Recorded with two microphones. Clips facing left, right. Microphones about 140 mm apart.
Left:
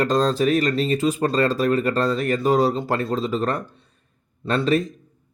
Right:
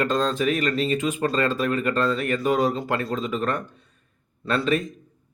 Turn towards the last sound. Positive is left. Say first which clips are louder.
# left 3 dB
turn(degrees=35)  # may be behind; listen again after turning